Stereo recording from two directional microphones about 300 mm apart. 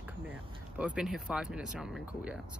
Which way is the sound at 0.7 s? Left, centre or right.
Centre.